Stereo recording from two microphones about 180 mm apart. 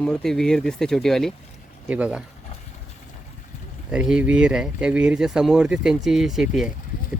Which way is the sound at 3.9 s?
5° right (ahead or behind).